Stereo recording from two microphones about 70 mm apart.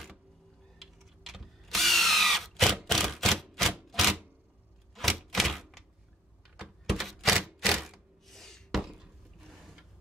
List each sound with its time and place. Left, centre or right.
0.7 s drill: centre
2.9 s typewriter: centre
5.3 s typewriter: centre
6.6 s thunk: centre
7.4 s a sound: centre